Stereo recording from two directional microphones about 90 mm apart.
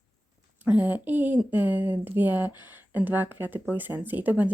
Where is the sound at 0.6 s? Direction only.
20° right (ahead or behind).